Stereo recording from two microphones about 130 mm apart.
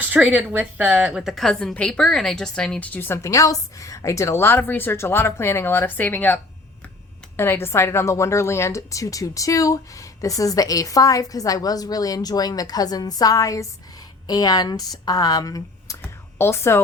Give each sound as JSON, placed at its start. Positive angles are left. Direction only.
{"t": 0.0, "sound": "a woman's voice", "side_deg": -10}